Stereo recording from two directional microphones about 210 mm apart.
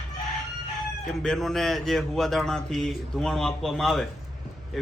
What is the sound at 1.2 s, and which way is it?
A man's voice, centre (ahead or behind).